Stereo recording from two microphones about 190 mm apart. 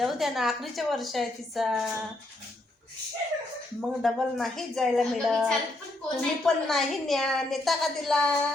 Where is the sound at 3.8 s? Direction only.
Centre (ahead or behind).